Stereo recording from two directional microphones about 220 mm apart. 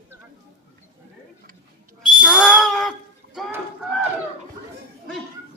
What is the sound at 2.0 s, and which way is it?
Owl, centre (ahead or behind).